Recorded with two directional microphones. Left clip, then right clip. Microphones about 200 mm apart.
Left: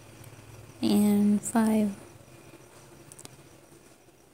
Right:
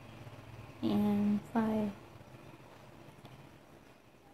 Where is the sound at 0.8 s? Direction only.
40° left (ahead or behind).